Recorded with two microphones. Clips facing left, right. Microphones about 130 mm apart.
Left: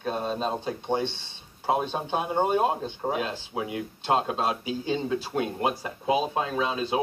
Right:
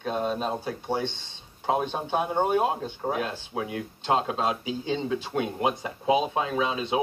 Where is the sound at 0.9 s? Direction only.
15° right (ahead or behind).